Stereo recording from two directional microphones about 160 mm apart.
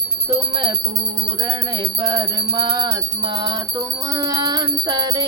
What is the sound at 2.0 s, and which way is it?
Music, 25° right (ahead or behind).